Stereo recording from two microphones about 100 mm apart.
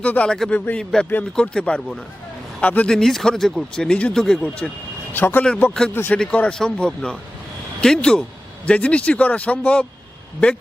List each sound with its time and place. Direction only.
0.0 s speech: 15° left (ahead or behind)
5.1 s speech: 20° left (ahead or behind)